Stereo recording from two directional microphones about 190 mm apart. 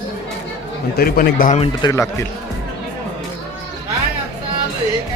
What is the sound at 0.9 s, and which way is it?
Speech, 50° left (ahead or behind).